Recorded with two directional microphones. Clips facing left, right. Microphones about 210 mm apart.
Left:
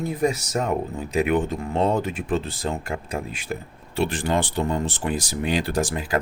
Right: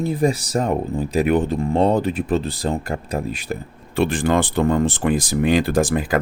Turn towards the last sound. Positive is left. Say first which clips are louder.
# right 6 dB
turn(degrees=-55)  # may be behind; listen again after turning